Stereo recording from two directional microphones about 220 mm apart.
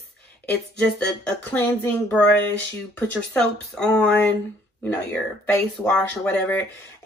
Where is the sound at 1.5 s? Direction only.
10° left (ahead or behind).